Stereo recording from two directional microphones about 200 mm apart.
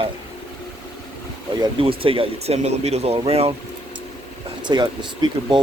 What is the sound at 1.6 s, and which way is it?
Speech, 25° right (ahead or behind).